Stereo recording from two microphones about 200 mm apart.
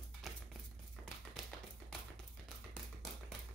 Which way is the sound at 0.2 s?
Centre (ahead or behind).